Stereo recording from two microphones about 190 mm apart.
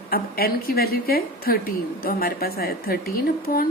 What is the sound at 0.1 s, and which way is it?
A woman's voice, 50° left (ahead or behind).